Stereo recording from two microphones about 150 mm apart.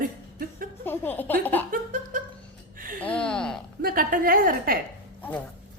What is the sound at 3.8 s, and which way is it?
A woman's voice, 70° right (ahead or behind).